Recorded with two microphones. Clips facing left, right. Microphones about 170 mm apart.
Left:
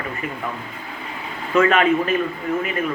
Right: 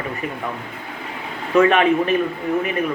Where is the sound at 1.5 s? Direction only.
15° right (ahead or behind).